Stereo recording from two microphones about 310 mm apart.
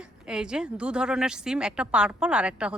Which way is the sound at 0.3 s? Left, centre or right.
Centre.